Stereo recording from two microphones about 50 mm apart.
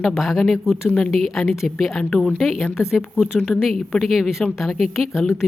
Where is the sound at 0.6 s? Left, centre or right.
Centre.